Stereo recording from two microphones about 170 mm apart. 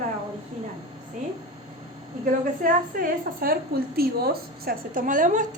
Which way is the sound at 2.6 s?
60° right (ahead or behind).